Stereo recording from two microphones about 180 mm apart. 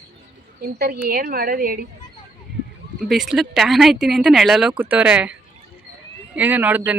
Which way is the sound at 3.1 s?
Centre (ahead or behind).